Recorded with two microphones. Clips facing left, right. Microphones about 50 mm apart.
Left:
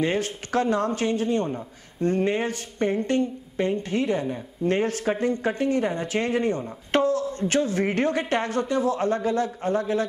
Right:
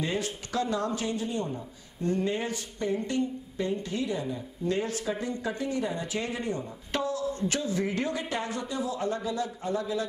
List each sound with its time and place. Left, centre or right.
0.0 s speech: left